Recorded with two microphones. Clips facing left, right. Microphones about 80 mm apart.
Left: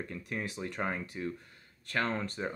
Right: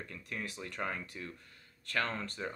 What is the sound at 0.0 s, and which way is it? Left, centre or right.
Speech, left.